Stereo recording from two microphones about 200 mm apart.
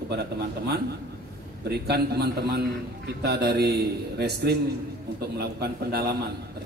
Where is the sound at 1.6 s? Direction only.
55° right (ahead or behind).